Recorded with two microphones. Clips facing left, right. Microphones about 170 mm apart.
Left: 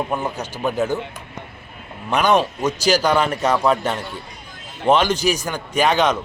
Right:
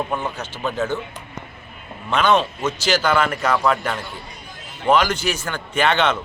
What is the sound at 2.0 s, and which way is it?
Speech, 15° left (ahead or behind).